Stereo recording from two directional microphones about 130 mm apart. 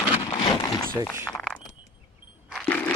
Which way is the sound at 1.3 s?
5° left (ahead or behind).